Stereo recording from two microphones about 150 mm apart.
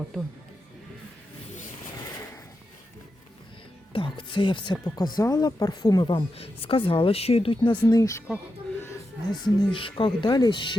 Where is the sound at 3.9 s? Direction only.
35° left (ahead or behind).